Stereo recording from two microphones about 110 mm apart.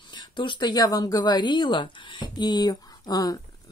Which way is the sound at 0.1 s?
45° left (ahead or behind).